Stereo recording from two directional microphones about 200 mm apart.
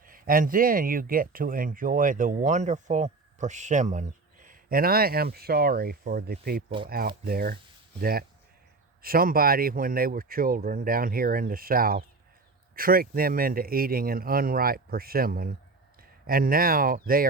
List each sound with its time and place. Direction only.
0.0 s speech: 45° right (ahead or behind)
6.7 s speech: 25° right (ahead or behind)
7.3 s speech: 50° right (ahead or behind)
9.0 s speech: 45° right (ahead or behind)